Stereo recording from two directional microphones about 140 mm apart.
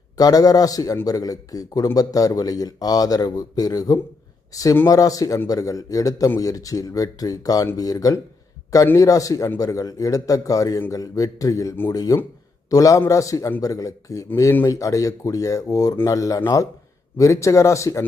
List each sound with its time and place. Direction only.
0.2 s a man's voice: 25° left (ahead or behind)